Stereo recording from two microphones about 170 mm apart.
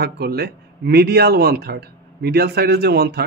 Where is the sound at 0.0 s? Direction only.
70° right (ahead or behind).